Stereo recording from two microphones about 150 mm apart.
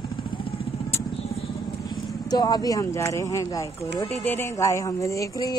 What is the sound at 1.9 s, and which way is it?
Speech, 25° left (ahead or behind).